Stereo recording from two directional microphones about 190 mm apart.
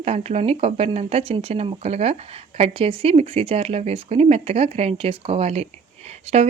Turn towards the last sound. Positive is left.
turn(degrees=-30)  # may be behind; listen again after turning